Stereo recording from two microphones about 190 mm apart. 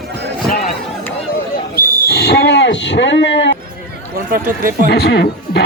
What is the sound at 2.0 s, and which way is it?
Speech, 65° left (ahead or behind).